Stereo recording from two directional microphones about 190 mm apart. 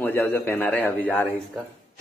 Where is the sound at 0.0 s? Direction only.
10° left (ahead or behind).